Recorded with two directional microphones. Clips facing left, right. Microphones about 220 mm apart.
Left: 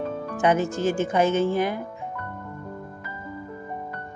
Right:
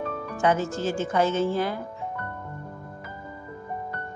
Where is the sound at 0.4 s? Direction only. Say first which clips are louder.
Left 2 dB; 15° left (ahead or behind).